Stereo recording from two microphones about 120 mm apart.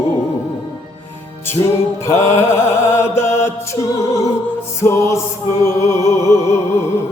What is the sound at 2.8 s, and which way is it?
Music, 20° left (ahead or behind).